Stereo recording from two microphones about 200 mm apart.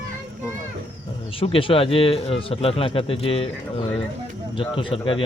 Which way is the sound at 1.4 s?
25° left (ahead or behind).